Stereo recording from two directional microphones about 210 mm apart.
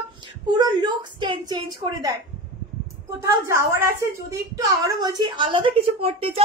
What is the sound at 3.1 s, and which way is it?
A woman's voice, 15° right (ahead or behind).